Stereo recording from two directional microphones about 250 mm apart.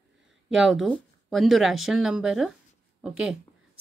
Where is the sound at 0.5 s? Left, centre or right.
Centre.